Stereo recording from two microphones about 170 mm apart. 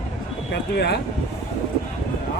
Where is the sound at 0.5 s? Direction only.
75° left (ahead or behind).